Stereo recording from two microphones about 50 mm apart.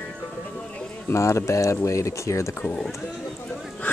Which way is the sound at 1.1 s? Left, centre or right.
Left.